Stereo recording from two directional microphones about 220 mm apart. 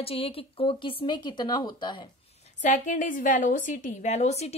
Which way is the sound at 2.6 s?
35° left (ahead or behind).